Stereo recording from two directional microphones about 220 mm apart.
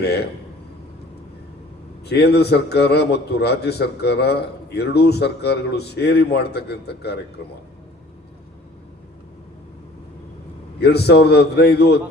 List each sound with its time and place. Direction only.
0.0 s a man's voice: 50° left (ahead or behind)
2.0 s a man's voice: 50° left (ahead or behind)
10.8 s a man's voice: 50° left (ahead or behind)